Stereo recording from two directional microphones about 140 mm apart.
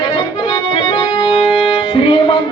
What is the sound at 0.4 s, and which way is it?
Music, 40° left (ahead or behind).